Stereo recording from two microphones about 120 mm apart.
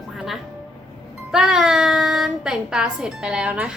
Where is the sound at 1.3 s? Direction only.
5° right (ahead or behind).